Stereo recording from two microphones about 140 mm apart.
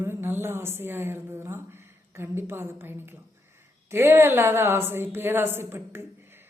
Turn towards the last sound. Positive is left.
turn(degrees=-15)  # may be behind; listen again after turning